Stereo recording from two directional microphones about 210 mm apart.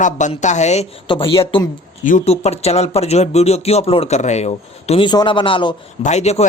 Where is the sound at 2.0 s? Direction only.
35° left (ahead or behind).